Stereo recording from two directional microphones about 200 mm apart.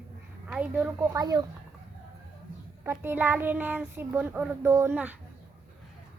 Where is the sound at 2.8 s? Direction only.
10° right (ahead or behind).